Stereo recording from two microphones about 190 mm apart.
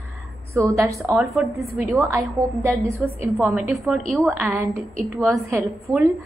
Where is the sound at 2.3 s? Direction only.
15° right (ahead or behind).